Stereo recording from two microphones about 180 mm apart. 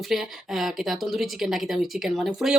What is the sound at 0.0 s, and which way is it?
Speech, centre (ahead or behind).